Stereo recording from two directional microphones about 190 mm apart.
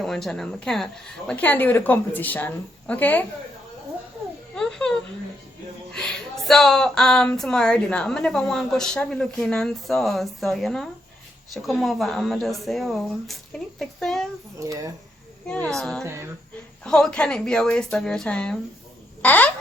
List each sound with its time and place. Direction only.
0.0 s a woman's voice: centre (ahead or behind)
4.5 s a sound: 5° left (ahead or behind)
5.9 s speech: 5° left (ahead or behind)
14.6 s speech: 20° right (ahead or behind)
15.6 s speech: 5° left (ahead or behind)
16.0 s speech: 15° right (ahead or behind)
16.8 s a woman's voice: 5° left (ahead or behind)